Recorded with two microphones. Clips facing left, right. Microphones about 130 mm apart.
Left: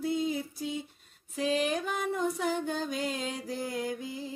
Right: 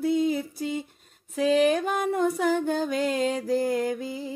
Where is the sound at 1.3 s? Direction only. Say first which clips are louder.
Right 8 dB; 55° right (ahead or behind).